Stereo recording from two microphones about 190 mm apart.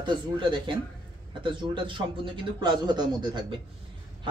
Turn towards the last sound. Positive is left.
turn(degrees=-25)  # may be behind; listen again after turning